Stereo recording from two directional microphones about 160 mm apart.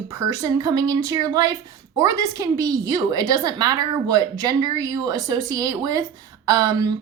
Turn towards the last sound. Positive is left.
turn(degrees=-25)  # may be behind; listen again after turning